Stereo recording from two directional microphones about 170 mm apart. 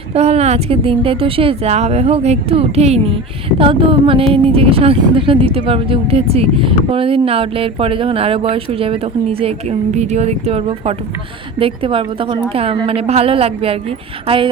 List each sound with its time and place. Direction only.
0.1 s a woman's voice: 40° right (ahead or behind)